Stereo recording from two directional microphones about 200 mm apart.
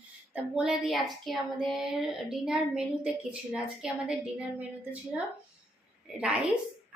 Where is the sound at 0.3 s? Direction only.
5° right (ahead or behind).